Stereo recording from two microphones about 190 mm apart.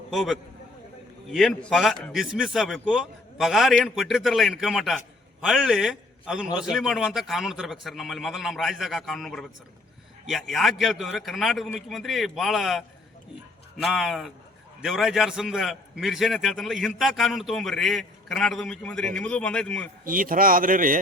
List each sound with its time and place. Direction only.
0.1 s a man's voice: centre (ahead or behind)
13.8 s a man's voice: centre (ahead or behind)
20.1 s speech: 45° right (ahead or behind)